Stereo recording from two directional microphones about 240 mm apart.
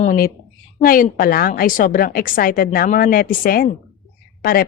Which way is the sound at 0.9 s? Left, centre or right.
Left.